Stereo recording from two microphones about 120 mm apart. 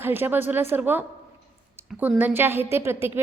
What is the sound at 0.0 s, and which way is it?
A woman's voice, 15° right (ahead or behind).